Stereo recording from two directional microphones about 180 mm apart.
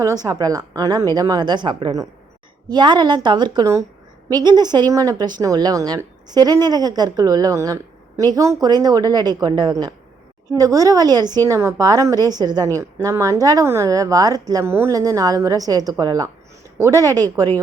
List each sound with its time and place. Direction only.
0.0 s a woman's voice: 20° right (ahead or behind)